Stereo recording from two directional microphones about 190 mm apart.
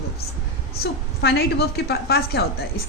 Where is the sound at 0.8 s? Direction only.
55° left (ahead or behind).